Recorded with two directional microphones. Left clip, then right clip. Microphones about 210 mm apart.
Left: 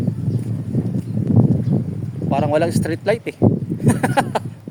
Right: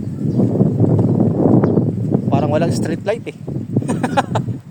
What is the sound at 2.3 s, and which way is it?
Speech, 5° left (ahead or behind).